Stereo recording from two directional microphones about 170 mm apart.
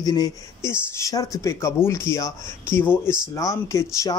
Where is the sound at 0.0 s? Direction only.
20° left (ahead or behind).